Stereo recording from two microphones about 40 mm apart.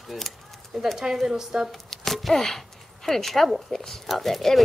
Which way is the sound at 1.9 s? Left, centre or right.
Centre.